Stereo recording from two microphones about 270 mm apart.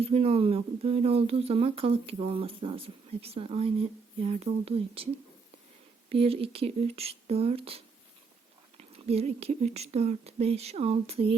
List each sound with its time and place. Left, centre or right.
0.0 s speech: right
6.1 s speech: right
8.8 s speech: right